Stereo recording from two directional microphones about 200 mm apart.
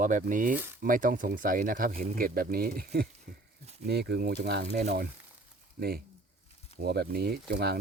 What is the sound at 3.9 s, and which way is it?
Speech, 55° right (ahead or behind).